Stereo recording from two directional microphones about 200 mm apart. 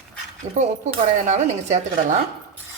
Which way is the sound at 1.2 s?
35° right (ahead or behind).